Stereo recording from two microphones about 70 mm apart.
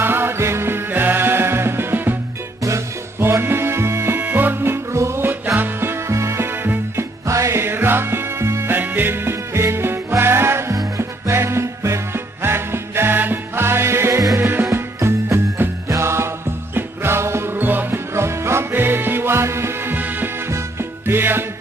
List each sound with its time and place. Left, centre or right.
0.0 s music: right
2.6 s music: right
4.2 s music: right
7.3 s music: right
8.7 s music: right
18.1 s music: right